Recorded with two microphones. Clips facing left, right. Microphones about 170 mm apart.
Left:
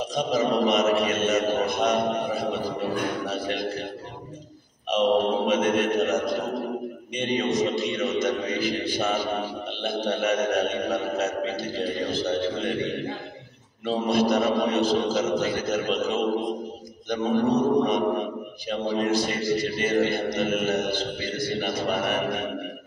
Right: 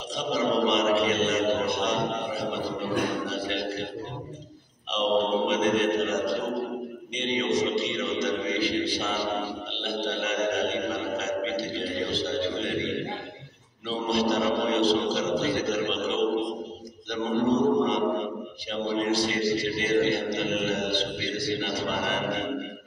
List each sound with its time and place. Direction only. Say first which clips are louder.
0.1 s a man's voice: left 1 dB; 45° left (ahead or behind)
5.5 s a man's voice: left 1 dB; 50° left (ahead or behind)
13.8 s a man's voice: left 3 dB; 50° left (ahead or behind)